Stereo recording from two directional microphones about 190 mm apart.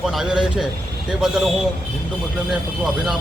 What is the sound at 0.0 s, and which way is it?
Speech, centre (ahead or behind).